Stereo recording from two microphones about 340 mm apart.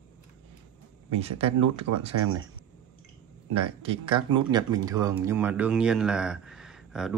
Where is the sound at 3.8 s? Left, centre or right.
Centre.